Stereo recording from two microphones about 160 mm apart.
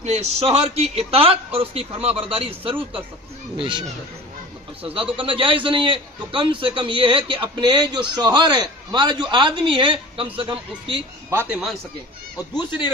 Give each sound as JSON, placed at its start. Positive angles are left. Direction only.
{"t": 0.0, "sound": "a man's voice", "side_deg": -40}
{"t": 4.8, "sound": "a man's voice", "side_deg": -35}
{"t": 11.2, "sound": "a man's voice", "side_deg": -10}
{"t": 12.5, "sound": "a man's voice", "side_deg": 30}